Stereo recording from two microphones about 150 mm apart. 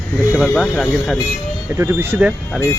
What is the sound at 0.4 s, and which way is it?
Speech, 5° left (ahead or behind).